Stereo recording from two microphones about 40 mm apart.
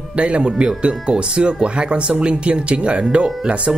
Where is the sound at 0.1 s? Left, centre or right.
Right.